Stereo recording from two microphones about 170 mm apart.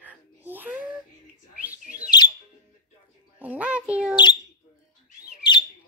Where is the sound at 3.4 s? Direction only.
10° right (ahead or behind).